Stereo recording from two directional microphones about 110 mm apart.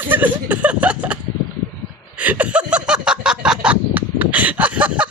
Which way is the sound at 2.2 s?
15° right (ahead or behind).